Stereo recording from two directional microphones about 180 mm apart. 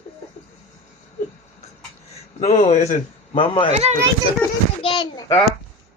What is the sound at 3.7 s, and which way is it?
Speech, 35° right (ahead or behind).